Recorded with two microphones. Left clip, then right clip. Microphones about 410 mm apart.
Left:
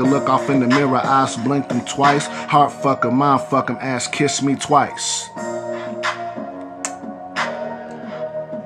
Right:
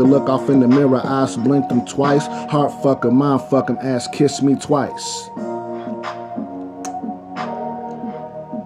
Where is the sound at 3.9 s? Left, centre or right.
Centre.